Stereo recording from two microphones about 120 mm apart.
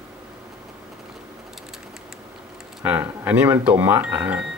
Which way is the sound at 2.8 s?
15° right (ahead or behind).